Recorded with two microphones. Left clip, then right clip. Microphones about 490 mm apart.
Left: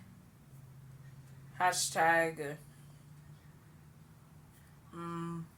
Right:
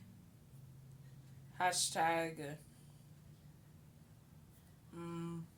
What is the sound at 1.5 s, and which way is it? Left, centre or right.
Speech, right.